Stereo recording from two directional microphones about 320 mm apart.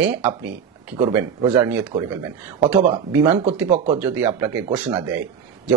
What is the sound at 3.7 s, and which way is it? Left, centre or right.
Speech, right.